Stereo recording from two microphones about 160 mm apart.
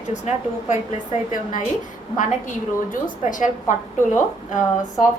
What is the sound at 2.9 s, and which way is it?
Speech, 55° left (ahead or behind).